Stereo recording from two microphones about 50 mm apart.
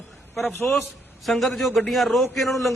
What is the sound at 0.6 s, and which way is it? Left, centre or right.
Speech, left.